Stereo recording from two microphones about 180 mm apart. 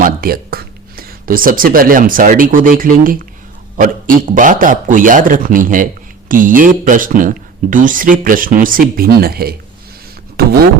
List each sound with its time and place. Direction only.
0.0 s a man's voice: 55° right (ahead or behind)